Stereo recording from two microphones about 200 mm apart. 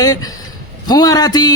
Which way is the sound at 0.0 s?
20° left (ahead or behind).